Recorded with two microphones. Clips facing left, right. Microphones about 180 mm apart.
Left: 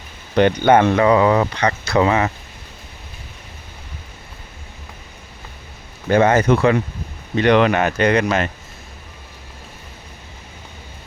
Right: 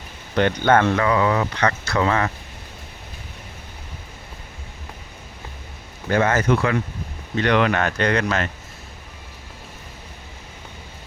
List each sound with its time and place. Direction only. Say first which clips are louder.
0.3 s speech: left 4 dB; 15° left (ahead or behind)
1.5 s speech: left 4 dB; 15° left (ahead or behind)
6.1 s speech: left 5 dB; 20° left (ahead or behind)